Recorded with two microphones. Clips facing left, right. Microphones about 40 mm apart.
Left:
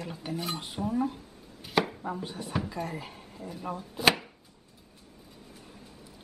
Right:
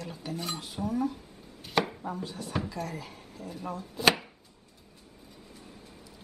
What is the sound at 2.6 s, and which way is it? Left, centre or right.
Speech, left.